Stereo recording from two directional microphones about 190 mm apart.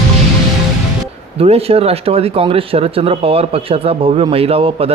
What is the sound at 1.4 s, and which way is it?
Speech, 30° right (ahead or behind).